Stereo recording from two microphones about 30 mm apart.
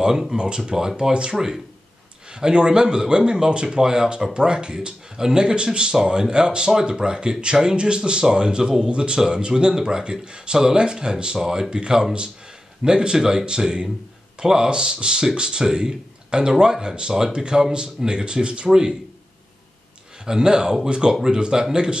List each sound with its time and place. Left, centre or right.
0.1 s speech: centre
0.9 s speech: right
1.3 s speech: centre
2.5 s speech: right
18.7 s speech: right
20.2 s speech: right